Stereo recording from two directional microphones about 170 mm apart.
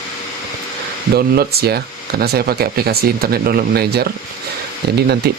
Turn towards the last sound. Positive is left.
turn(degrees=-70)  # may be behind; listen again after turning